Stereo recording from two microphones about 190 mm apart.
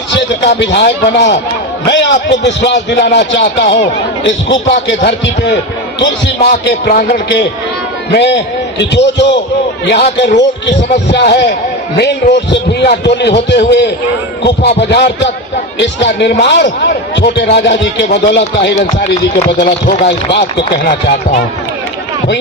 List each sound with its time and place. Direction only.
0.1 s a man's voice: 70° left (ahead or behind)
6.7 s a man's voice: 55° left (ahead or behind)